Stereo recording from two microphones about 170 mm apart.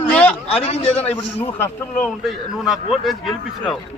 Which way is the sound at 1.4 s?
15° left (ahead or behind).